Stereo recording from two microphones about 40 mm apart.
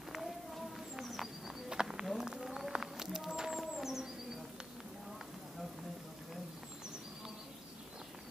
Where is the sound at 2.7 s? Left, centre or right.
Centre.